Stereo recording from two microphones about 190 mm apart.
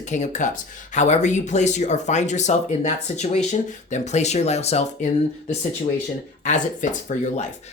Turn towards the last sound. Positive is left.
turn(degrees=40)  # may be behind; listen again after turning